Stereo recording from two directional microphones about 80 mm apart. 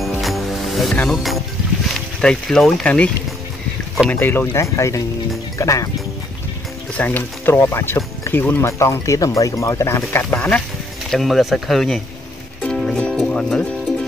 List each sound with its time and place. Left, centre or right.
0.0 s music: centre
1.0 s speech: centre
4.1 s speech: left
4.7 s speech: left
7.0 s speech: left
11.1 s speech: centre
12.9 s music: centre